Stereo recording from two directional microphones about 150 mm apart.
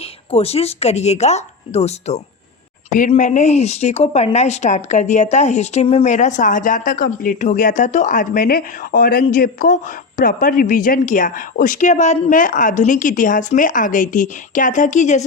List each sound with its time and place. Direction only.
0.3 s speech: 40° left (ahead or behind)
3.1 s speech: 55° left (ahead or behind)